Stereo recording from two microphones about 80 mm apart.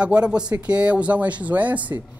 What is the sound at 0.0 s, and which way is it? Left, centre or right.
A man's voice, centre.